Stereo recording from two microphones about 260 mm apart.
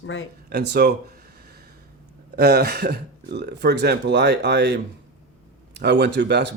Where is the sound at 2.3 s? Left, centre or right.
Right.